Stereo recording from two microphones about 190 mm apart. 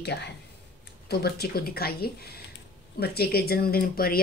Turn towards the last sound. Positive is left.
turn(degrees=50)  # may be behind; listen again after turning